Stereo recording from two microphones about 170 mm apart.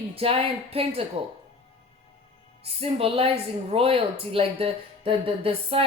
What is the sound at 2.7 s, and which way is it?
Speech, 35° right (ahead or behind).